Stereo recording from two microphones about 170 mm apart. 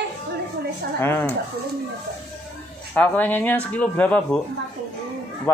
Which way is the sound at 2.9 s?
10° left (ahead or behind).